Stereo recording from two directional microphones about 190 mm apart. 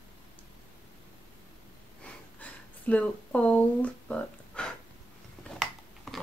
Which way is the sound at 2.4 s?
5° left (ahead or behind).